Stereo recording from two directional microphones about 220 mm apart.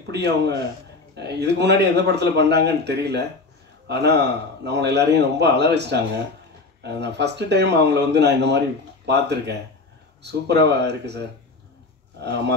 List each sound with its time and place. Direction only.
0.1 s speech: 50° right (ahead or behind)
12.2 s speech: 50° right (ahead or behind)